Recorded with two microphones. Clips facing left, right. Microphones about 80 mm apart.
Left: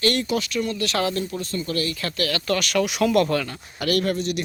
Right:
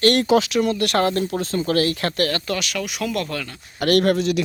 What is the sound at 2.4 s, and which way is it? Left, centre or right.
Speech, centre.